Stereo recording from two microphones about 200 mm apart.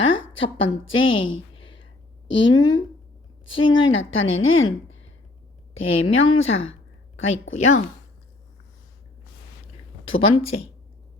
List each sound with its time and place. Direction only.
0.0 s a sound: 70° left (ahead or behind)
0.6 s a woman's voice: 70° left (ahead or behind)
2.6 s speech: 20° left (ahead or behind)
3.7 s a woman's voice: 75° left (ahead or behind)
10.2 s speech: 30° left (ahead or behind)